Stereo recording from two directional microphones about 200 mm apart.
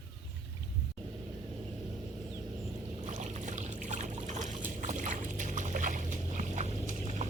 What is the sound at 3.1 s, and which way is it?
Boat, 35° right (ahead or behind).